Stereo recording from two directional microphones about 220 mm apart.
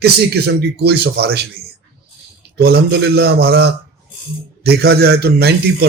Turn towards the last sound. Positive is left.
turn(degrees=-45)  # may be behind; listen again after turning